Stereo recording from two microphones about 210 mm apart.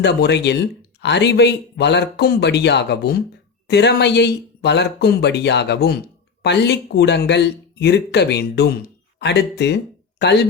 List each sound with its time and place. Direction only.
0.0 s speech: 55° left (ahead or behind)